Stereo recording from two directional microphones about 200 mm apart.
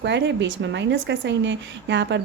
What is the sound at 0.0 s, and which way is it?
A woman's voice, 60° right (ahead or behind).